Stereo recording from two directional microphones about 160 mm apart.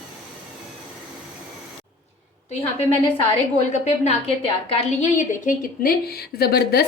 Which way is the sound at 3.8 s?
40° left (ahead or behind).